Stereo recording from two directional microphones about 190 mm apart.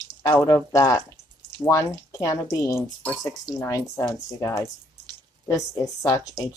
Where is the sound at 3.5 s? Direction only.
15° left (ahead or behind).